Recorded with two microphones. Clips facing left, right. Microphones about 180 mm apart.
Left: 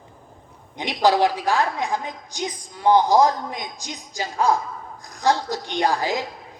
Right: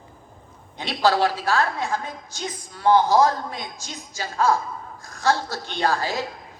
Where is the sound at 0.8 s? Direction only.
15° left (ahead or behind).